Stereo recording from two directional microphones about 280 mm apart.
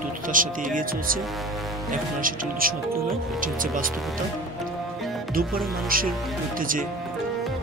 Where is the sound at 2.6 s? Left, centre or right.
Right.